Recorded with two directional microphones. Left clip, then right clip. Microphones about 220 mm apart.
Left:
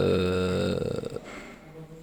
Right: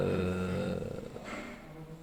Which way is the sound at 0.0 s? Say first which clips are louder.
Left 8 dB; 55° left (ahead or behind).